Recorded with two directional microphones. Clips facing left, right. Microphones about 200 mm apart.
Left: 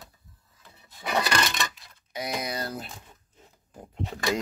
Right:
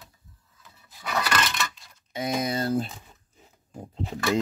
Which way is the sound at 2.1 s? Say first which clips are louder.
Right 5 dB; 25° right (ahead or behind).